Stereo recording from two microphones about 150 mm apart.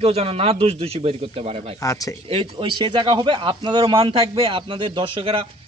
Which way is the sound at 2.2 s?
35° right (ahead or behind).